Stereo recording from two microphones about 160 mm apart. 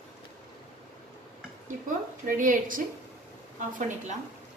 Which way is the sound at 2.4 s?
60° right (ahead or behind).